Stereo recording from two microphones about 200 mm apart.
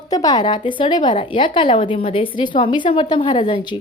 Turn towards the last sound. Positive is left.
turn(degrees=25)  # may be behind; listen again after turning